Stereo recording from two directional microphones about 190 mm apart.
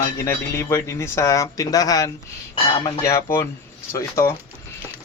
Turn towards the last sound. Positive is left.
turn(degrees=15)  # may be behind; listen again after turning